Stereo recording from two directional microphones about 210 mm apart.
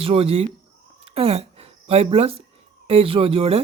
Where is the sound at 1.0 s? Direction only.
30° right (ahead or behind).